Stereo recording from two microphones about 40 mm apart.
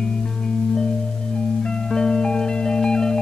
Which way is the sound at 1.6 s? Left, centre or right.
Centre.